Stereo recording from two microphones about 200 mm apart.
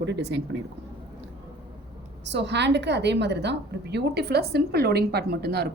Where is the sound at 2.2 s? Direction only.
60° right (ahead or behind).